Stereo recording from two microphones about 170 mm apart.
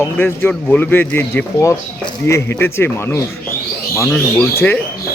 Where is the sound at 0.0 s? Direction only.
10° left (ahead or behind).